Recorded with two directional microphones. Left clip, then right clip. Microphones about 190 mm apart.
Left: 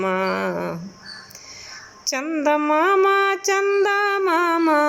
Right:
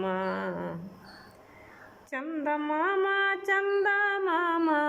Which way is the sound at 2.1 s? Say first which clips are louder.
Left 11 dB; 20° left (ahead or behind).